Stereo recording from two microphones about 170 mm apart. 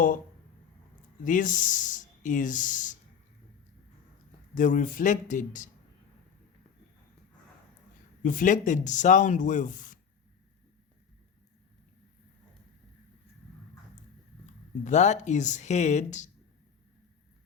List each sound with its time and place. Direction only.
1.2 s speech: 50° left (ahead or behind)
4.5 s speech: 50° left (ahead or behind)
8.2 s speech: 50° left (ahead or behind)
14.8 s speech: 45° left (ahead or behind)